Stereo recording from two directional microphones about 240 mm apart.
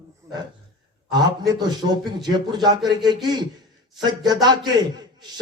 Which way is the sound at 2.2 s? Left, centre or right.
Centre.